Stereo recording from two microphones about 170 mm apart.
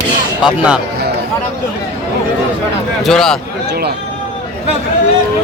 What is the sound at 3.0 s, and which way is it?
Speech, centre (ahead or behind).